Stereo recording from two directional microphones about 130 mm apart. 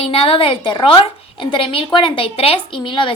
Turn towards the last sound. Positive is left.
turn(degrees=40)  # may be behind; listen again after turning